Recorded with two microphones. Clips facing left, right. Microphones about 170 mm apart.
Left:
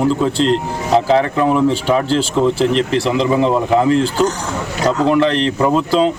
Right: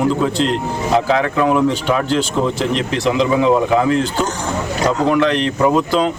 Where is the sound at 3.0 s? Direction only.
Centre (ahead or behind).